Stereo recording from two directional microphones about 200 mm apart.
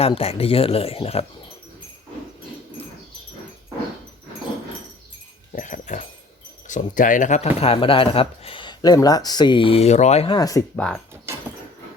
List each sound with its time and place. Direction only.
0.0 s speech: 30° left (ahead or behind)
5.5 s a sound: 40° left (ahead or behind)
6.7 s speech: 40° left (ahead or behind); by 10.6 s 20° left (ahead or behind)
10.8 s speech: 5° left (ahead or behind)